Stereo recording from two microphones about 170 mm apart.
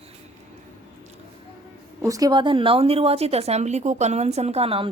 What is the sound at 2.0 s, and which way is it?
A woman's voice, 20° right (ahead or behind).